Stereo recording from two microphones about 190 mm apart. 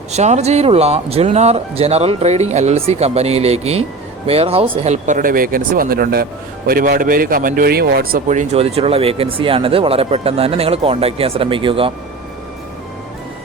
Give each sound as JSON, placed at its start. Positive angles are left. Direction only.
{"t": 0.1, "sound": "a man's voice", "side_deg": -35}